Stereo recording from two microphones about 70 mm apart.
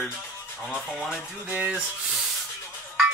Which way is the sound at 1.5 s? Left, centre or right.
Centre.